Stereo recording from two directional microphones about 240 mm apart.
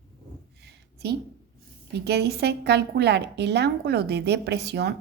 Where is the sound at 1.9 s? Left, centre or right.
Right.